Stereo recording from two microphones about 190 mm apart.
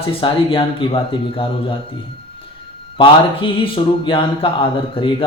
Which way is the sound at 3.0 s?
25° left (ahead or behind).